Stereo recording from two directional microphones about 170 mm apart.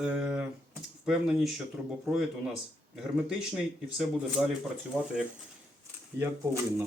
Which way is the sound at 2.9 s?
5° right (ahead or behind).